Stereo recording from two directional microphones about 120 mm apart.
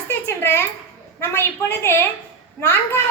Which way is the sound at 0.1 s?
20° left (ahead or behind).